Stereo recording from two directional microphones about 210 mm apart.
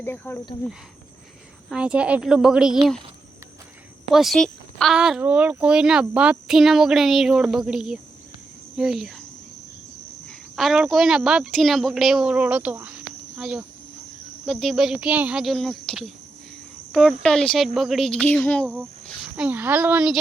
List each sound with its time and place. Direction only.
0.0 s speech: 10° left (ahead or behind)
1.7 s speech: 5° right (ahead or behind)
4.1 s speech: centre (ahead or behind)
10.2 s speech: centre (ahead or behind)